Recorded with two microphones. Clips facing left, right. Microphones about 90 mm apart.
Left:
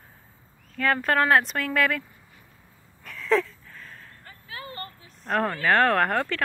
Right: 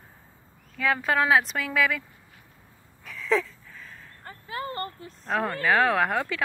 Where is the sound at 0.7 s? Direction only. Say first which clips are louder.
Left 1 dB; 5° right (ahead or behind).